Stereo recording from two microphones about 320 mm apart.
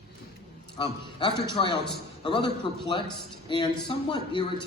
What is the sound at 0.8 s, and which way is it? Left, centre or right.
A man's voice, centre.